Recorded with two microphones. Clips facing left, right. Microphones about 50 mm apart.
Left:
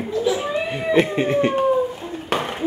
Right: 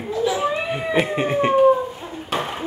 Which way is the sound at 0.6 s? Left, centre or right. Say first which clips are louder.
Left 2 dB; centre.